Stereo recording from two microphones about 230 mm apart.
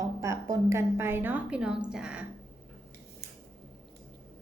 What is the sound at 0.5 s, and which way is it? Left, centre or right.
A woman's voice, centre.